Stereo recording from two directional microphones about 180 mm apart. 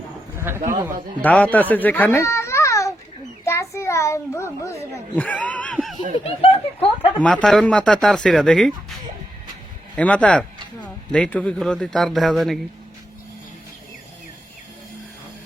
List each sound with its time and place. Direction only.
0.3 s a sound: 15° right (ahead or behind)
1.2 s speech: 10° left (ahead or behind)
1.7 s children playing: 10° left (ahead or behind)
3.4 s a child's voice: 15° left (ahead or behind)
6.4 s speech: 35° left (ahead or behind)
7.2 s speech: 5° left (ahead or behind)